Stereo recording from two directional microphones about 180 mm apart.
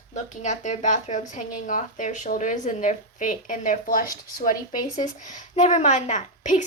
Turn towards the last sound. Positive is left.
turn(degrees=40)  # may be behind; listen again after turning